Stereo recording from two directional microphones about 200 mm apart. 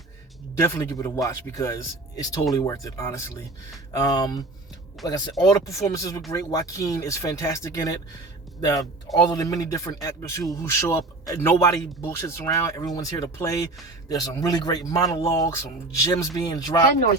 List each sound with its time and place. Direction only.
0.6 s speech: 10° left (ahead or behind)
9.1 s speech: 15° left (ahead or behind)